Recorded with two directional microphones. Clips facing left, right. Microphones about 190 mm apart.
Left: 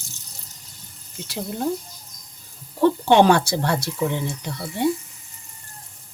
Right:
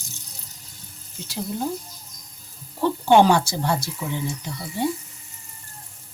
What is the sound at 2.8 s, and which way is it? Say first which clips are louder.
Speech: left 1 dB; 60° left (ahead or behind).